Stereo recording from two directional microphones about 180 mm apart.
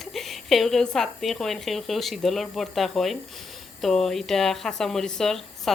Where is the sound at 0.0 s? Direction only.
Centre (ahead or behind).